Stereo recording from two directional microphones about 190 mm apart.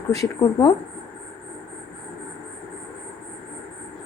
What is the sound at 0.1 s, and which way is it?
Speech, 20° left (ahead or behind).